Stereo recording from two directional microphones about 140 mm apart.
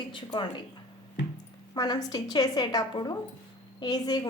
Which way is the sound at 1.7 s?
30° left (ahead or behind).